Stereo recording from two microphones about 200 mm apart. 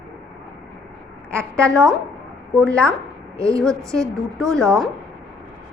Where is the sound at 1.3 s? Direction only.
5° left (ahead or behind).